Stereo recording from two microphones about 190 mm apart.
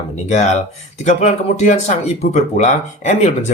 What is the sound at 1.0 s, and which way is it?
Speech, 35° left (ahead or behind).